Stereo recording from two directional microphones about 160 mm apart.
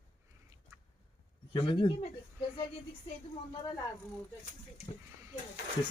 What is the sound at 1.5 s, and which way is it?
Speech, 30° left (ahead or behind).